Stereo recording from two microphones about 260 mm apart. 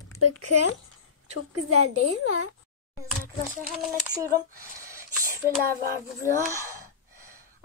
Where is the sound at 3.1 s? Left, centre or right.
Centre.